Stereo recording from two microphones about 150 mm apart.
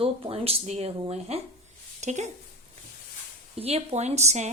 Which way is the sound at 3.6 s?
45° right (ahead or behind).